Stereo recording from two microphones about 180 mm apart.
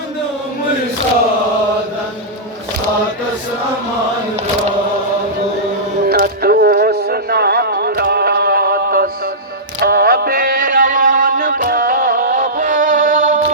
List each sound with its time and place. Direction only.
6.1 s music: 60° right (ahead or behind)